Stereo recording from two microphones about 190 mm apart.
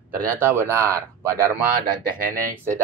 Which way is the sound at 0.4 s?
15° right (ahead or behind).